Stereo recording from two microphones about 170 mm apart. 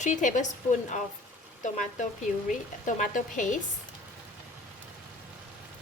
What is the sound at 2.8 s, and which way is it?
Speech, 45° left (ahead or behind).